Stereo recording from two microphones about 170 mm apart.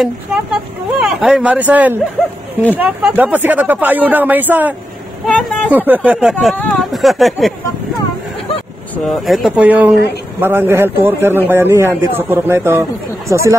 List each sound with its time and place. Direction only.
1.2 s a man's voice: 5° right (ahead or behind)
2.2 s speech: 5° left (ahead or behind)
2.7 s a man's voice: 10° right (ahead or behind)
5.2 s speech: 5° left (ahead or behind)
5.7 s a man's voice: 10° right (ahead or behind)
8.9 s a man's voice: centre (ahead or behind); by 13.6 s 15° right (ahead or behind)